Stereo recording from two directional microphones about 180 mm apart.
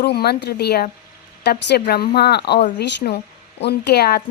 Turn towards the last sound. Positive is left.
turn(degrees=65)  # may be behind; listen again after turning